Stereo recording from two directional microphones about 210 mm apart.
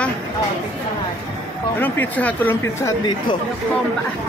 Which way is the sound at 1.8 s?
10° left (ahead or behind).